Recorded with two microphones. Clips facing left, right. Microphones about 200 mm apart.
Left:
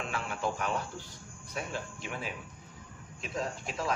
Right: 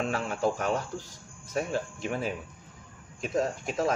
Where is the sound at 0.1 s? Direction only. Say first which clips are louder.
Right 6 dB; 40° right (ahead or behind).